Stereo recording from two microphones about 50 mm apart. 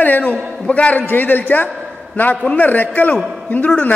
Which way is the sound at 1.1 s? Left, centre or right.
Left.